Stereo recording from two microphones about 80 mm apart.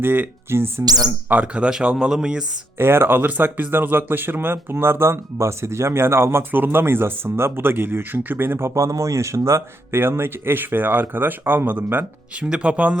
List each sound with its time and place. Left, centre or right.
0.0 s speech: right
0.9 s speech: right
1.3 s speech: centre
2.7 s speech: right